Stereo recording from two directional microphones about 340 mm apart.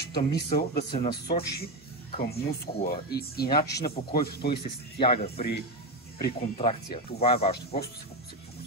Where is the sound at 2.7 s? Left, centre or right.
Left.